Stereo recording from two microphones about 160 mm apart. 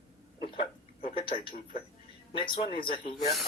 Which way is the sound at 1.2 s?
30° left (ahead or behind).